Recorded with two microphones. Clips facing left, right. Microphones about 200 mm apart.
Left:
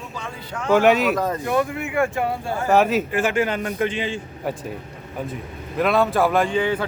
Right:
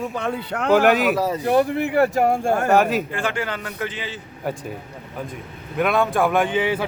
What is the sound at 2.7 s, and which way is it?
Speech, centre (ahead or behind).